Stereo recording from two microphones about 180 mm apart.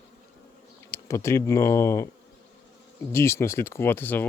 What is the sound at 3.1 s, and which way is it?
Speech, 15° left (ahead or behind).